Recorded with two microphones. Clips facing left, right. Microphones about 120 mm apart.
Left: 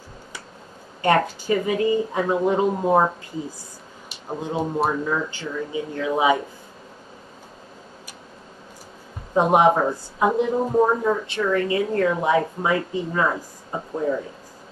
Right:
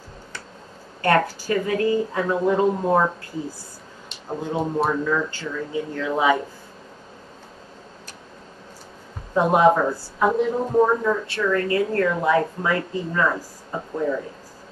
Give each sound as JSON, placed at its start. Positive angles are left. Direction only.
{"t": 1.0, "sound": "a woman's voice", "side_deg": 20}
{"t": 4.3, "sound": "speech", "side_deg": 15}
{"t": 4.6, "sound": "a man's voice", "side_deg": 0}
{"t": 5.0, "sound": "speech", "side_deg": 20}
{"t": 9.3, "sound": "speech", "side_deg": 20}